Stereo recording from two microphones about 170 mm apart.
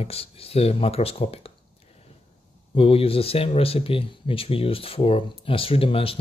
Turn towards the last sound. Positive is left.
turn(degrees=35)  # may be behind; listen again after turning